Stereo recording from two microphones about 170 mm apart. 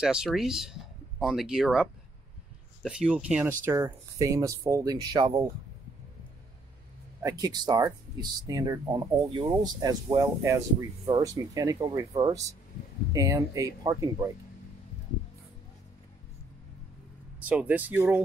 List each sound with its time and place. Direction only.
0.0 s speech: 5° right (ahead or behind)
3.6 s speech: 20° right (ahead or behind)
7.2 s speech: 20° right (ahead or behind)
17.4 s speech: 10° right (ahead or behind)